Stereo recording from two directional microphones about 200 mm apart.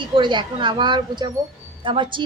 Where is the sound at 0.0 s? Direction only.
25° right (ahead or behind).